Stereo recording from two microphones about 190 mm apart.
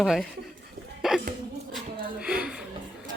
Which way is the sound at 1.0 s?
Centre (ahead or behind).